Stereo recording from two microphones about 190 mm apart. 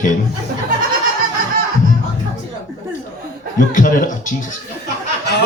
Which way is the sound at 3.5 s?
45° left (ahead or behind).